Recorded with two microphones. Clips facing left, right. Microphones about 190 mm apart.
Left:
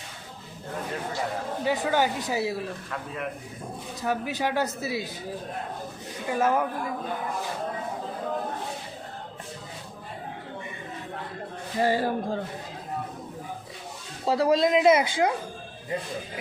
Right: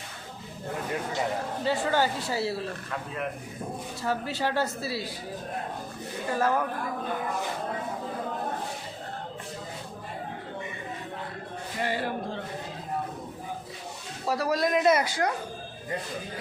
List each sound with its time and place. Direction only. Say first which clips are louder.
1.6 s speech: left 1 dB; 15° left (ahead or behind)
4.0 s speech: left 2 dB; 15° left (ahead or behind)
6.3 s speech: left 2 dB; 15° left (ahead or behind)
11.8 s speech: left 6 dB; 40° left (ahead or behind)
14.3 s speech: left 5 dB; 25° left (ahead or behind)